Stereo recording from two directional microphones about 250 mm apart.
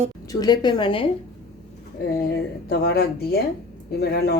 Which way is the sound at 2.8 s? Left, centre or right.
Left.